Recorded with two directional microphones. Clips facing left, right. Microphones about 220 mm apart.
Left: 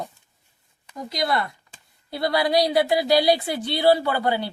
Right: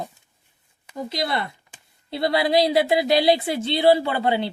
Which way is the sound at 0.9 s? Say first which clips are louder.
Left 1 dB; 25° right (ahead or behind).